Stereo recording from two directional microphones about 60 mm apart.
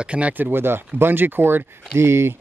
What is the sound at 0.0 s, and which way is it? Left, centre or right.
Speech, centre.